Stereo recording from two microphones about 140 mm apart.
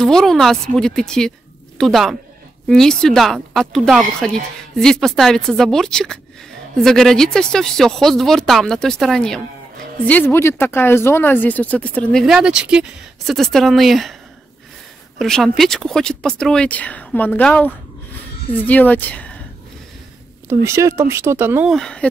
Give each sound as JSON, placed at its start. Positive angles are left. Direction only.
{"t": 0.0, "sound": "a woman's voice", "side_deg": 5}
{"t": 10.0, "sound": "speech", "side_deg": 15}
{"t": 15.1, "sound": "a woman's voice", "side_deg": 5}
{"t": 20.4, "sound": "speech", "side_deg": -20}
{"t": 21.6, "sound": "a woman's voice", "side_deg": 5}